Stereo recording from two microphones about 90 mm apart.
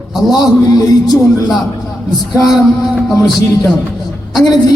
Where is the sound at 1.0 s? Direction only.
45° left (ahead or behind).